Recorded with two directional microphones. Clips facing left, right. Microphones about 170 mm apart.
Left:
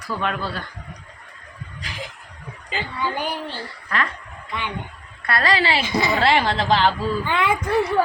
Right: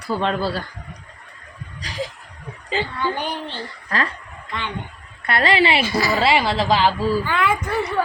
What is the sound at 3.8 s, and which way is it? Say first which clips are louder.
Speech: right 1 dB; 35° right (ahead or behind).